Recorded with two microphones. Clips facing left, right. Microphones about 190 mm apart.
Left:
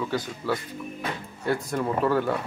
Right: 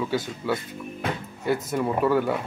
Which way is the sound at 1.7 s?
5° right (ahead or behind).